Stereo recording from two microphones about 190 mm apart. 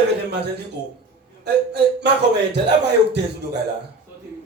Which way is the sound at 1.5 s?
60° right (ahead or behind).